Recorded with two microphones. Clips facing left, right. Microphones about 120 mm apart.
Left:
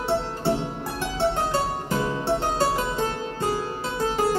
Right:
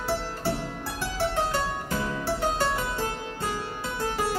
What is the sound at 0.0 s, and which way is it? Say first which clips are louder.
Music: left 4 dB; 20° left (ahead or behind).